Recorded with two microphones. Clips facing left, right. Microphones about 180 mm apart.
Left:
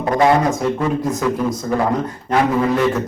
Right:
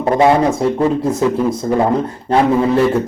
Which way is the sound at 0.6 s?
30° right (ahead or behind).